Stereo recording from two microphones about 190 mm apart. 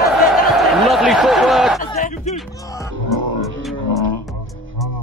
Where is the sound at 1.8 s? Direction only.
45° left (ahead or behind).